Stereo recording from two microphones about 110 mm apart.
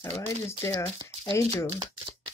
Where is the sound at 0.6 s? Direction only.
30° left (ahead or behind).